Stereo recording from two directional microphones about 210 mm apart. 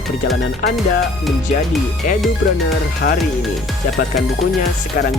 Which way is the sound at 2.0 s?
40° left (ahead or behind).